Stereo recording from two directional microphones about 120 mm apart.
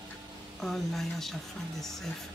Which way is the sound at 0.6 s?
5° left (ahead or behind).